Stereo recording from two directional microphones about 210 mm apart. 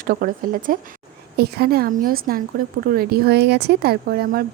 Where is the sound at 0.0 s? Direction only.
45° right (ahead or behind).